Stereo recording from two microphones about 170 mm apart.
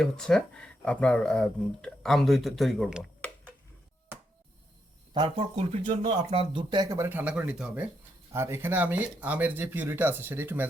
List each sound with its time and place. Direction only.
0.0 s speech: 5° left (ahead or behind)
5.1 s speech: 30° right (ahead or behind)
5.8 s speech: 50° right (ahead or behind); by 10.7 s 10° right (ahead or behind)